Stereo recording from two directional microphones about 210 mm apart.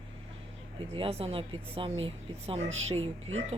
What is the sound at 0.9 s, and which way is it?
Speech, 25° right (ahead or behind).